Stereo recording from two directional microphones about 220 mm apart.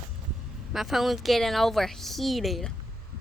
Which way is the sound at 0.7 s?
Centre (ahead or behind).